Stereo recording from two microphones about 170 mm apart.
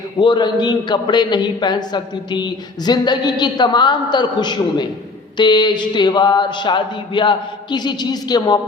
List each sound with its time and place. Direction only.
0.2 s a man's voice: 25° left (ahead or behind)